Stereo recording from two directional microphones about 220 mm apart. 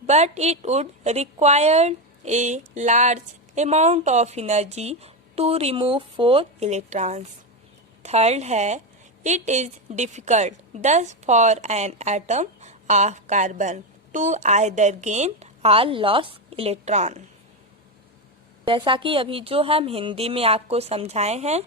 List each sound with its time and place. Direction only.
0.1 s a woman's voice: 30° right (ahead or behind)
18.6 s a woman's voice: 25° right (ahead or behind)